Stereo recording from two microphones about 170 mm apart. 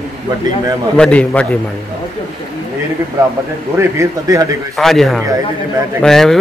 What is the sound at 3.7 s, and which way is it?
Speech, 15° right (ahead or behind).